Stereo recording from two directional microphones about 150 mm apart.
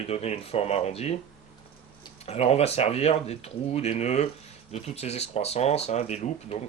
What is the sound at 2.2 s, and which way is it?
Speech, 45° left (ahead or behind).